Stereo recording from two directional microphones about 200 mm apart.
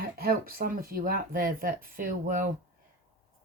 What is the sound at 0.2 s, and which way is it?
Speech, 50° right (ahead or behind).